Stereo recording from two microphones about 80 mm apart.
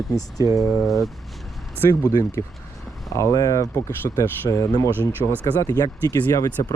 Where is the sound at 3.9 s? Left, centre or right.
Left.